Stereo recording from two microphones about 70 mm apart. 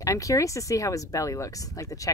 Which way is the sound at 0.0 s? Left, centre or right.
Left.